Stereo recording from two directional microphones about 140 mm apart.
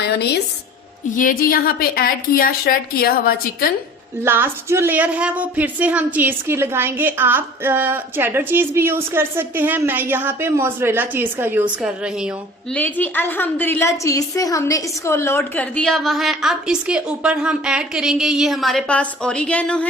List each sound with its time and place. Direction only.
1.1 s a woman's voice: 80° left
4.2 s speech: 15° right (ahead or behind)
12.7 s a woman's voice: 10° left (ahead or behind)